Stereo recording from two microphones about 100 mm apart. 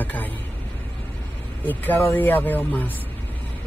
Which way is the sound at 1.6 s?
20° left (ahead or behind).